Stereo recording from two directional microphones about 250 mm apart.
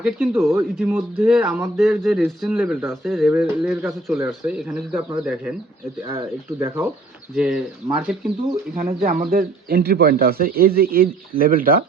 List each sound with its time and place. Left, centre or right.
0.0 s speech: centre
6.1 s speech: centre
9.0 s speech: right